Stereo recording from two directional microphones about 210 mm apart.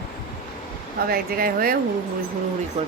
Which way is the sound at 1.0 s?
45° right (ahead or behind).